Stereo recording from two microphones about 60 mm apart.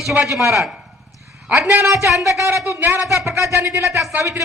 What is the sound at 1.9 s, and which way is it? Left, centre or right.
Speech, right.